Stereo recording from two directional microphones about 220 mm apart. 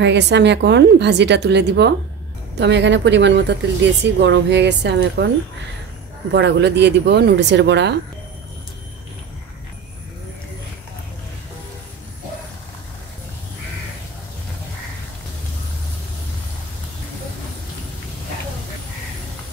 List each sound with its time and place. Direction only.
0.0 s speech: 50° right (ahead or behind)
6.3 s speech: 50° right (ahead or behind)